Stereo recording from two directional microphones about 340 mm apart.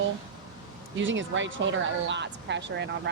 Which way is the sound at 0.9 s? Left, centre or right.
Right.